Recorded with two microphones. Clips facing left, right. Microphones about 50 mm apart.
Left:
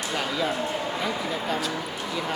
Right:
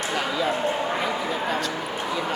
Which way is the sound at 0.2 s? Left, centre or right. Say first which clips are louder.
Right 2 dB; centre.